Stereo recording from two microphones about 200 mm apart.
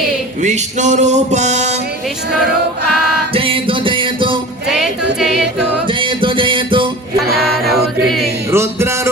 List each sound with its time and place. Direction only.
0.4 s a sound: 35° right (ahead or behind)
3.3 s music: 25° right (ahead or behind)
4.7 s music: centre (ahead or behind)
5.9 s music: 25° right (ahead or behind)
7.3 s music: centre (ahead or behind)
8.4 s music: 15° right (ahead or behind)